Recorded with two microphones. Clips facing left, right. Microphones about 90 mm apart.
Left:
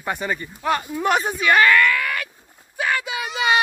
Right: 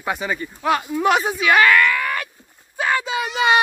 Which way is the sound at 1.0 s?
15° right (ahead or behind).